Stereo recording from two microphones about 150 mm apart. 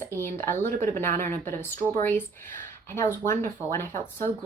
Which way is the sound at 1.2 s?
55° right (ahead or behind).